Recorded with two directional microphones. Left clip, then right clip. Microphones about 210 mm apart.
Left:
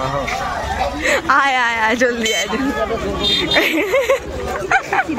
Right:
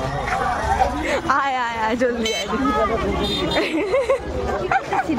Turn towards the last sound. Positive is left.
turn(degrees=5)  # may be behind; listen again after turning